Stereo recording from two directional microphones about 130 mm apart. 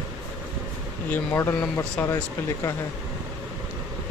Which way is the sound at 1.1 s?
20° left (ahead or behind).